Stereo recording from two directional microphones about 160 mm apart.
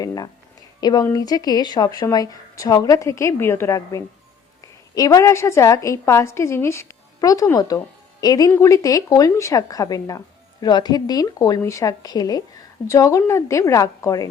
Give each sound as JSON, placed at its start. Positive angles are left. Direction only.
{"t": 0.0, "sound": "a woman's voice", "side_deg": 25}